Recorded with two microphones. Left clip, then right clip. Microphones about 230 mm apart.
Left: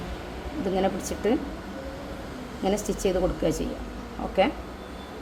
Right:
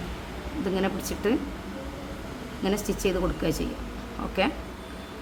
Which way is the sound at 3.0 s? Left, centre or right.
Centre.